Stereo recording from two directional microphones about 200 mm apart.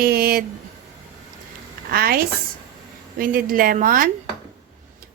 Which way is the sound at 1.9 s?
50° right (ahead or behind).